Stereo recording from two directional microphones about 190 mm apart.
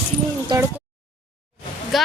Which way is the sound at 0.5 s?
20° right (ahead or behind).